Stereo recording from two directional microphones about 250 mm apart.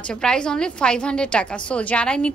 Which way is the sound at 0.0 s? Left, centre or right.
Centre.